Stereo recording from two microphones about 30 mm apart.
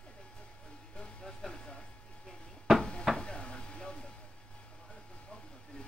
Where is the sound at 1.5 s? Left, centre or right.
Left.